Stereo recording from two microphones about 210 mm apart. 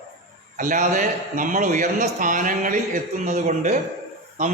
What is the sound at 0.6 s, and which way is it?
A man's voice, 35° right (ahead or behind).